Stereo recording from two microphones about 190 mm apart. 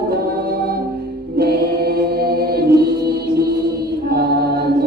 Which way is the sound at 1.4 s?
55° right (ahead or behind).